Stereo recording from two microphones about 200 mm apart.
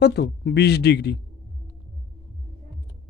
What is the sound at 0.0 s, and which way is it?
Speech, 55° left (ahead or behind).